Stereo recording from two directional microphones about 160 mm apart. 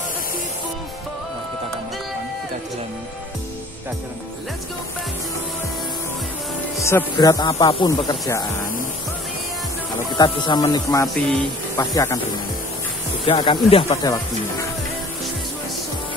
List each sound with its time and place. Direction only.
6.8 s speech: 15° left (ahead or behind)
10.1 s speech: 25° left (ahead or behind)
13.2 s speech: 30° left (ahead or behind)
14.0 s speech: 20° left (ahead or behind)